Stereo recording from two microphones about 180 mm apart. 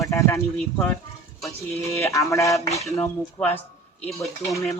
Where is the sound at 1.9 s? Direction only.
15° left (ahead or behind).